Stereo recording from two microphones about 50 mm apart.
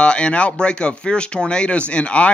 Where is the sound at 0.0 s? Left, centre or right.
Left.